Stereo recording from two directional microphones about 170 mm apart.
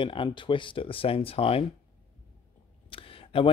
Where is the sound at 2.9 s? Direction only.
30° left (ahead or behind).